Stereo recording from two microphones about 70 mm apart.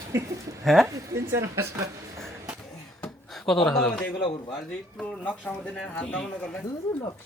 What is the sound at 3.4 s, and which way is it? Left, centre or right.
Speech, centre.